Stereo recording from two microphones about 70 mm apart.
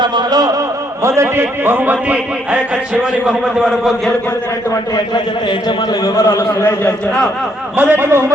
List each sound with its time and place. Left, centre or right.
0.0 s a sound: right
1.0 s a man's voice: right; by 4.1 s centre
5.5 s a man's voice: left
6.1 s a man's voice: left
7.8 s a man's voice: right